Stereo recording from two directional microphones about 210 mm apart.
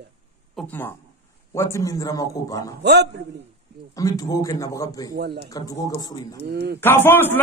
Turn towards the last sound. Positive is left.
turn(degrees=10)  # may be behind; listen again after turning